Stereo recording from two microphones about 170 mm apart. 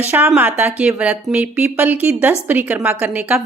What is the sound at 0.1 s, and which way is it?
A woman's voice, 10° right (ahead or behind).